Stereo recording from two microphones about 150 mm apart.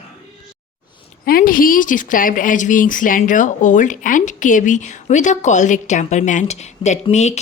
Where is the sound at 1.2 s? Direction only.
75° left (ahead or behind).